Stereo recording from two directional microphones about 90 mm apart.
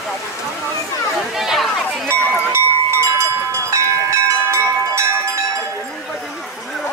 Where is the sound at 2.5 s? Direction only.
30° right (ahead or behind).